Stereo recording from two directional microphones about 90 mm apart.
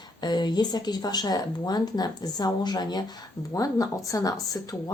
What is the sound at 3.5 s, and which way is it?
Speech, 40° left (ahead or behind).